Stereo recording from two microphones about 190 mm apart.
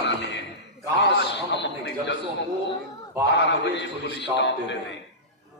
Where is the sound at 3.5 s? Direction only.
65° left (ahead or behind).